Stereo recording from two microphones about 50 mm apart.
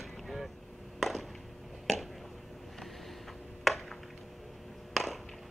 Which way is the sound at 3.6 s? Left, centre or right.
Centre.